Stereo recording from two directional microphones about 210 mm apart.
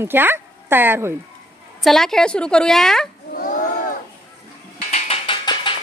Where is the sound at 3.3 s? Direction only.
40° left (ahead or behind).